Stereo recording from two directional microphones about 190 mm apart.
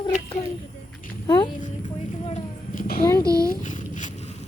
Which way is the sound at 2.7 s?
50° left (ahead or behind).